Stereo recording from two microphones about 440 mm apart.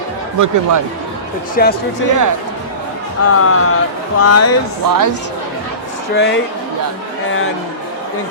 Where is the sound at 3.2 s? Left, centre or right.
Left.